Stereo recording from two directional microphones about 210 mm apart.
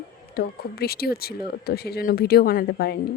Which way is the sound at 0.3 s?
45° left (ahead or behind).